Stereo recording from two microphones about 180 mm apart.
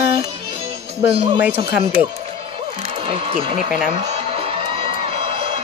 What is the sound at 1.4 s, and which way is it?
Speech, 10° right (ahead or behind).